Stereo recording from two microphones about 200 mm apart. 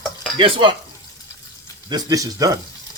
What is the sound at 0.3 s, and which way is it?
Stir, 25° right (ahead or behind).